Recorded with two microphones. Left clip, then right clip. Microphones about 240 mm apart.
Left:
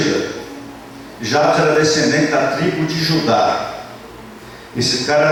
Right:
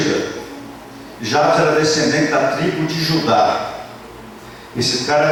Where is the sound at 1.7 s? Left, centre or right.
Centre.